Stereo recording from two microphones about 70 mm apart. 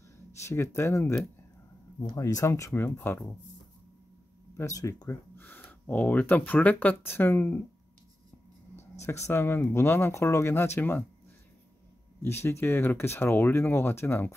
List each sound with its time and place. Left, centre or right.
0.5 s speech: left
2.0 s speech: left
2.7 s speech: left
4.6 s speech: left
5.4 s speech: left
8.7 s speech: left
12.2 s speech: left